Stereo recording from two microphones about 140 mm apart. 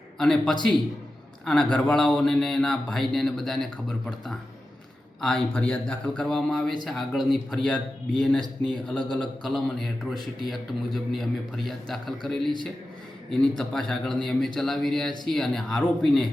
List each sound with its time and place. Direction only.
0.2 s a man's voice: 5° left (ahead or behind)